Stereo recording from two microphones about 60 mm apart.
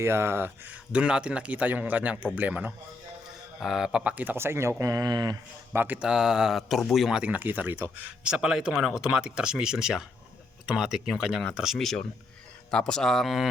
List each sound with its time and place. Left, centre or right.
0.0 s speech: right
0.9 s a man's voice: centre
3.6 s speech: centre
4.0 s a man's voice: right
4.4 s speech: right
4.9 s speech: right
5.7 s speech: right
6.0 s speech: centre
7.1 s a man's voice: centre
7.4 s speech: right
8.2 s speech: centre
11.8 s speech: centre